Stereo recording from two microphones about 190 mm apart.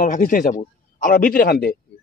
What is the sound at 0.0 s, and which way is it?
A man's voice, 45° left (ahead or behind).